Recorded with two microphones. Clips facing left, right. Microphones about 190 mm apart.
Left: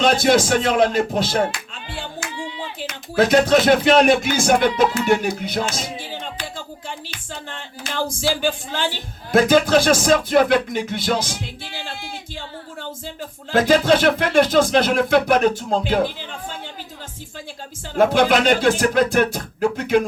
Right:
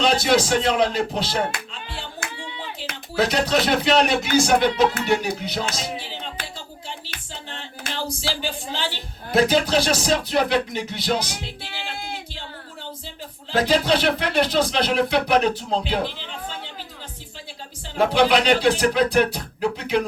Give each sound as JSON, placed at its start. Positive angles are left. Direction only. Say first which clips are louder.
{"t": 0.0, "sound": "music", "louder": "left 3 dB", "side_deg": 50}
{"t": 3.2, "sound": "music", "louder": "left 6 dB", "side_deg": 50}
{"t": 7.5, "sound": "music", "louder": "left 3 dB", "side_deg": 50}
{"t": 13.5, "sound": "music", "louder": "left 4 dB", "side_deg": 50}
{"t": 17.9, "sound": "music", "louder": "left 2 dB", "side_deg": 50}